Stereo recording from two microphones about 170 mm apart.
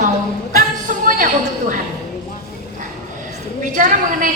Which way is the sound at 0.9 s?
50° right (ahead or behind).